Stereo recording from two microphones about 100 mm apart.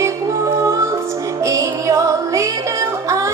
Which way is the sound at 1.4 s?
30° right (ahead or behind).